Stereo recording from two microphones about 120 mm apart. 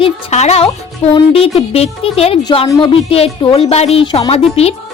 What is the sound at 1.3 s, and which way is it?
Speech, 55° left (ahead or behind).